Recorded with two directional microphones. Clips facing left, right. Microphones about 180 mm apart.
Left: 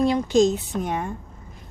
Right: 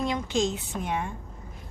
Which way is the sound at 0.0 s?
35° left (ahead or behind).